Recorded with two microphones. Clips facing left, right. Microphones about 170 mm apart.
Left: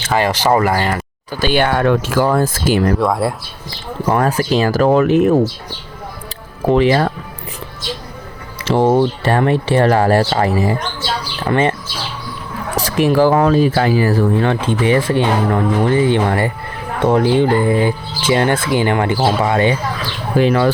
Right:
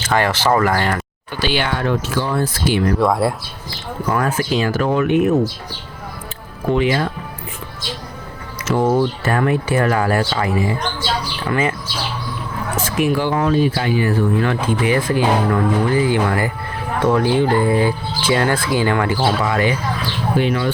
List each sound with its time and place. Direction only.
0.1 s speech: 15° left (ahead or behind)
1.3 s speech: 45° left (ahead or behind)
3.0 s speech: centre (ahead or behind)
4.0 s speech: 35° left (ahead or behind)
6.7 s speech: 35° left (ahead or behind)
8.6 s speech: 25° left (ahead or behind)
12.7 s speech: 35° left (ahead or behind)
20.5 s speech: 90° left